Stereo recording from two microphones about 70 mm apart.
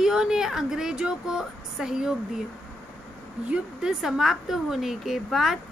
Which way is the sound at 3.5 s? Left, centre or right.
Centre.